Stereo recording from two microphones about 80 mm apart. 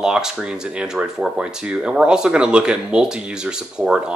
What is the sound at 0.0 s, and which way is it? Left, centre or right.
Speech, centre.